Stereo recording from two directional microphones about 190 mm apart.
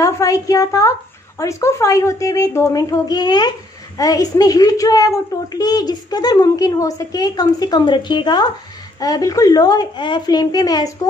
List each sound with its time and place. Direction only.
0.0 s a woman's voice: 20° left (ahead or behind)